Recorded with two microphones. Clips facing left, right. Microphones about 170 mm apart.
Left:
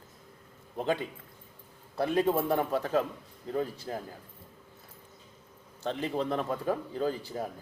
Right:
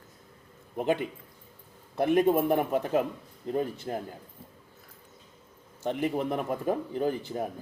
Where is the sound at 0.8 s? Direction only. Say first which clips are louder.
Right 3 dB; 15° right (ahead or behind).